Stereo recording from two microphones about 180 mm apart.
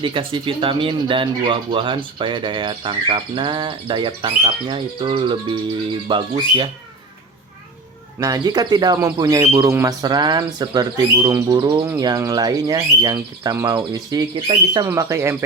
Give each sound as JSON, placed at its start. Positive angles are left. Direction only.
{"t": 0.0, "sound": "speech", "side_deg": -30}
{"t": 8.2, "sound": "speech", "side_deg": -20}
{"t": 14.8, "sound": "speech", "side_deg": -15}